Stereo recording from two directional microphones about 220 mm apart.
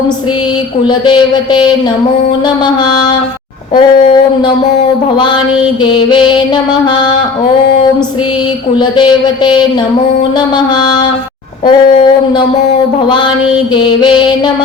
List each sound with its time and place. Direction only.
0.9 s music: 20° left (ahead or behind)
3.8 s music: 20° left (ahead or behind)
5.8 s music: 20° left (ahead or behind)
8.7 s music: 20° left (ahead or behind)
11.6 s music: 20° left (ahead or behind)